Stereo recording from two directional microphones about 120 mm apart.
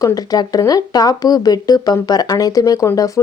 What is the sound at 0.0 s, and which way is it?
Speech, 30° left (ahead or behind).